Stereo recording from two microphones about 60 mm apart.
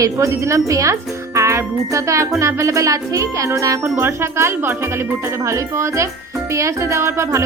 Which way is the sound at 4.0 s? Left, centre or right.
Right.